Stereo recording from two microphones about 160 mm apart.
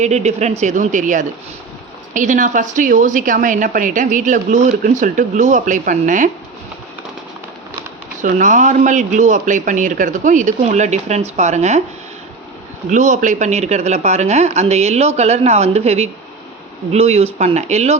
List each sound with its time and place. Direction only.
0.0 s speech: 45° right (ahead or behind)
8.2 s speech: 55° right (ahead or behind)
12.9 s speech: 50° right (ahead or behind)